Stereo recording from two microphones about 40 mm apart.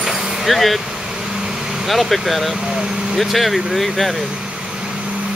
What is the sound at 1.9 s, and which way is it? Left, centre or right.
Speech, centre.